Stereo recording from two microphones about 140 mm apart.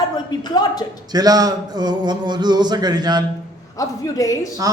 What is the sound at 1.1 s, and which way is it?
A man's voice, 25° right (ahead or behind).